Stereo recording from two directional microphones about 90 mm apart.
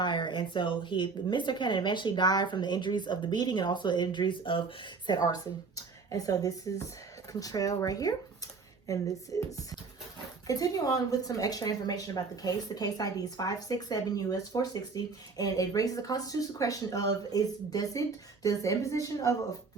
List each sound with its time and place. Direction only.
0.0 s speech: 60° left (ahead or behind); by 19.1 s 35° left (ahead or behind)